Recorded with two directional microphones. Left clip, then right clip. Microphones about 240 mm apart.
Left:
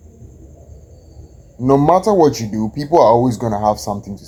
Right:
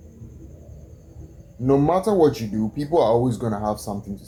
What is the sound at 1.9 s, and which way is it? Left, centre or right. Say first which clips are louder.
Speech: left 6 dB; left.